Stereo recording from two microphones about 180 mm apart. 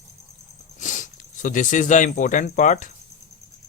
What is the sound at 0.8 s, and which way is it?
Speech, 45° left (ahead or behind).